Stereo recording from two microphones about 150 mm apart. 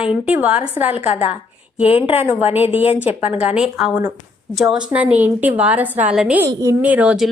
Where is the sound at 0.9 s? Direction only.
45° left (ahead or behind).